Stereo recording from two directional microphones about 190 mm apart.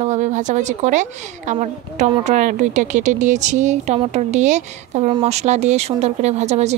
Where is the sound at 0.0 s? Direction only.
40° right (ahead or behind).